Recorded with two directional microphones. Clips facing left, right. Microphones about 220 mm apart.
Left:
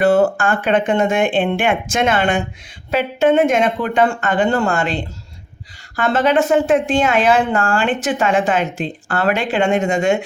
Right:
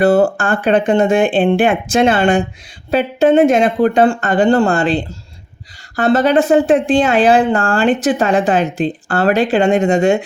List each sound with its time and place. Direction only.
0.0 s speech: 35° right (ahead or behind)